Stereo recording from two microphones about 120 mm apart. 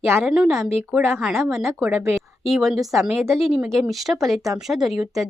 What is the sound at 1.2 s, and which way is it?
A woman's voice, 5° right (ahead or behind).